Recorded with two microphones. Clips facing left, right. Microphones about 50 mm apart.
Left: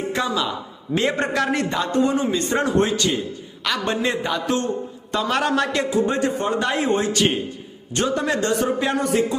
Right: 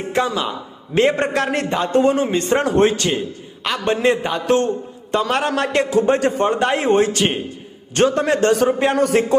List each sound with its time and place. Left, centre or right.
0.1 s a man's voice: right
3.6 s a man's voice: right
5.9 s a man's voice: right
7.9 s a man's voice: right
9.0 s a man's voice: right